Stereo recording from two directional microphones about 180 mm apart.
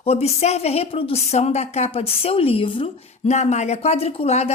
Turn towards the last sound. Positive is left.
turn(degrees=35)  # may be behind; listen again after turning